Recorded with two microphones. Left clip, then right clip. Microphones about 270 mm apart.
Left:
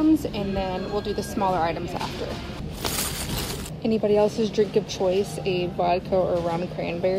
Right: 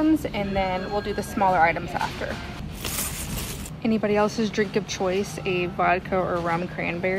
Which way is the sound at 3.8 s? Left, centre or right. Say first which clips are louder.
Left 2 dB; centre.